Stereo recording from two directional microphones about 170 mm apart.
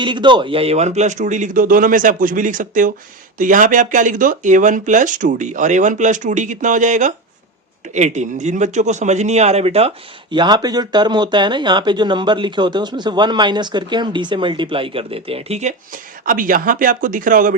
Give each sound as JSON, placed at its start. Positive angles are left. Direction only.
{"t": 0.0, "sound": "speech", "side_deg": -25}
{"t": 10.3, "sound": "speech", "side_deg": -25}